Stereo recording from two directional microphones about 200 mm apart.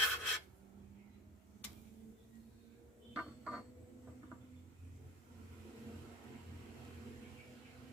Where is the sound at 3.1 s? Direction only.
5° right (ahead or behind).